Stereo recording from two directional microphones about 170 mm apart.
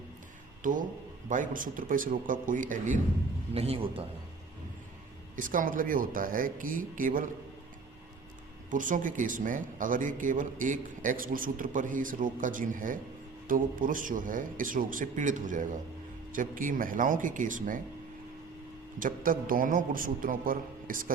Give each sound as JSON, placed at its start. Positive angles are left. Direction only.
{"t": 0.6, "sound": "a man's voice", "side_deg": -50}
{"t": 3.5, "sound": "a man's voice", "side_deg": -35}
{"t": 5.4, "sound": "a man's voice", "side_deg": -55}
{"t": 8.7, "sound": "a man's voice", "side_deg": -50}
{"t": 18.9, "sound": "a man's voice", "side_deg": -55}